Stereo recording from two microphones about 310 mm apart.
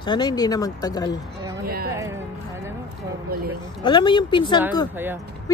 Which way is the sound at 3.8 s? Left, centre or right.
Centre.